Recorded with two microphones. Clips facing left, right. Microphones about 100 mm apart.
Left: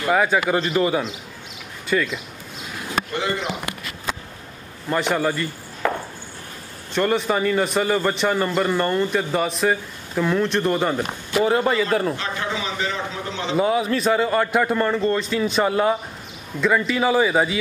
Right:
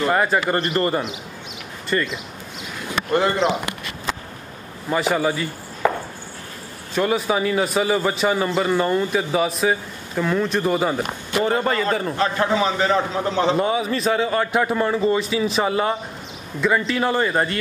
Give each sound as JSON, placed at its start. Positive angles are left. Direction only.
{"t": 0.1, "sound": "speech", "side_deg": 0}
{"t": 4.8, "sound": "speech", "side_deg": -5}
{"t": 6.9, "sound": "speech", "side_deg": -5}
{"t": 12.2, "sound": "a man's voice", "side_deg": -40}
{"t": 13.6, "sound": "speech", "side_deg": 0}